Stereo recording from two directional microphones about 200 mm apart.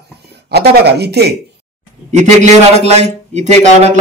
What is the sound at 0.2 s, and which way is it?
Speech, 55° right (ahead or behind).